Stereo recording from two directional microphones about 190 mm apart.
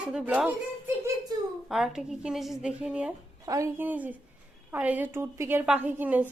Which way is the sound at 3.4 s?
15° right (ahead or behind).